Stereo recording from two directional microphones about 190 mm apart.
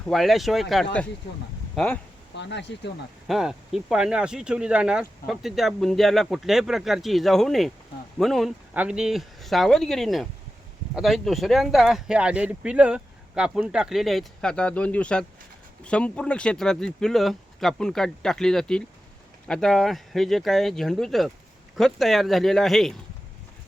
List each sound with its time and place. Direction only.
0.1 s speech: centre (ahead or behind)
2.3 s speech: 65° left (ahead or behind)
3.2 s speech: centre (ahead or behind)